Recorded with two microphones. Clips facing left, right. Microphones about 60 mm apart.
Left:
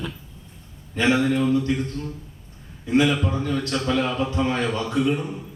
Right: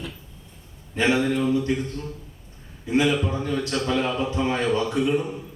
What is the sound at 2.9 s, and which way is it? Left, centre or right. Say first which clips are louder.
Speech: left 2 dB; centre.